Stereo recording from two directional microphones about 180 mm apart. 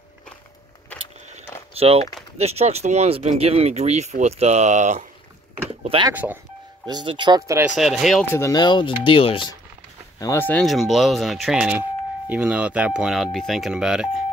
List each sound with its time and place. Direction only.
1.8 s speech: 35° right (ahead or behind)
5.9 s speech: 25° right (ahead or behind)
7.6 s speech: centre (ahead or behind)
8.4 s speech: 20° left (ahead or behind)
10.1 s speech: 15° left (ahead or behind)
10.6 s speech: centre (ahead or behind)